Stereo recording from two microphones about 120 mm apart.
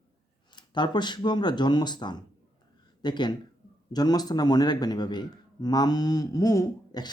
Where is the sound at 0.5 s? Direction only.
40° left (ahead or behind).